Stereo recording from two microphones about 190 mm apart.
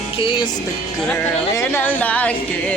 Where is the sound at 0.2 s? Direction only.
25° left (ahead or behind).